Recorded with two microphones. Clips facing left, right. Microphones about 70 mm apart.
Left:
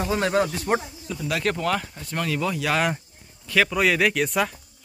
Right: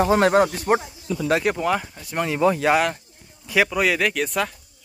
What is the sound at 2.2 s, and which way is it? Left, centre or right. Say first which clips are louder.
Speech: right 7 dB; right.